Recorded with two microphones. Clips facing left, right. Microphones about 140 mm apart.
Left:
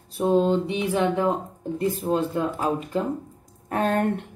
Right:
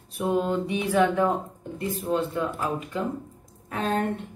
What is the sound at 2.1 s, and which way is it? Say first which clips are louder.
Speech: even; 35° left (ahead or behind).